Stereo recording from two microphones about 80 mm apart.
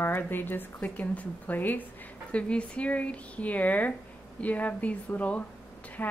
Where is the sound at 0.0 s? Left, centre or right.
Left.